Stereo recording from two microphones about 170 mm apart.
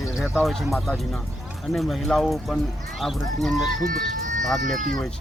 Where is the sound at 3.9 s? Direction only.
50° right (ahead or behind).